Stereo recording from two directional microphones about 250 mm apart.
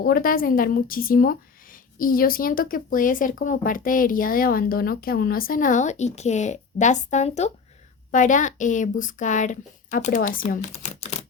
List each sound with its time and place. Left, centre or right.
0.0 s a woman's voice: left